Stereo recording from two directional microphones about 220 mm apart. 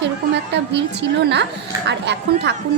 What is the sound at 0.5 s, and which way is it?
A woman's voice, 50° right (ahead or behind).